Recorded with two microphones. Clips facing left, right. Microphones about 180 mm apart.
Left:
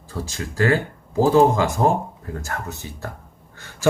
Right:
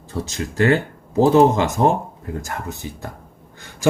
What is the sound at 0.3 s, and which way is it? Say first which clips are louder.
Speech: right 3 dB; 25° right (ahead or behind).